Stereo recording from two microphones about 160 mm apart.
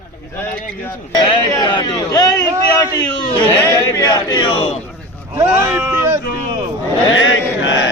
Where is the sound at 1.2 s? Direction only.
25° left (ahead or behind).